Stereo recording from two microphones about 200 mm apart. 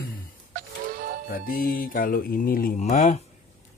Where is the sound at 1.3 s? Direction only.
45° left (ahead or behind).